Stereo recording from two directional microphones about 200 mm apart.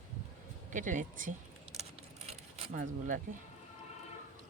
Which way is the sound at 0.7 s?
40° right (ahead or behind).